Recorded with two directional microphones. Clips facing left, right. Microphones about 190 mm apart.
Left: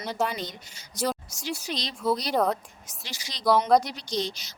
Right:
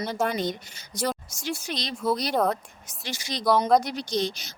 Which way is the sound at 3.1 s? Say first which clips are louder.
Even; 50° right (ahead or behind).